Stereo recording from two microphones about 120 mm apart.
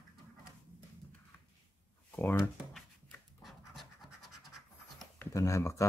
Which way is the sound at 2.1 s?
20° left (ahead or behind).